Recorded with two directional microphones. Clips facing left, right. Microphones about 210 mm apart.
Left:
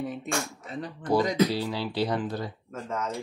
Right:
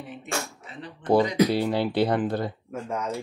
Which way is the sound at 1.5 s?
55° right (ahead or behind).